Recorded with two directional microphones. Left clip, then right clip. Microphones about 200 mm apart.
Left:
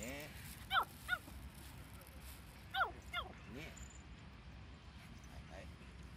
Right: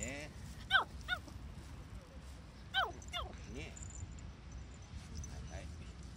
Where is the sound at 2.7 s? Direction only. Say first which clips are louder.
Right 2 dB; 25° right (ahead or behind).